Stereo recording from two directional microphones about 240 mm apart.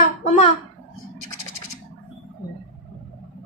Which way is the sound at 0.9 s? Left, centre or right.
Left.